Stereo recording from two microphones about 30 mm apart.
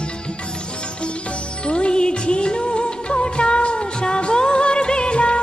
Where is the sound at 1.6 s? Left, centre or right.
Left.